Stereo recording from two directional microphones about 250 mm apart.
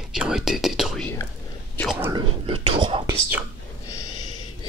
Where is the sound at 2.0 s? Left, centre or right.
Centre.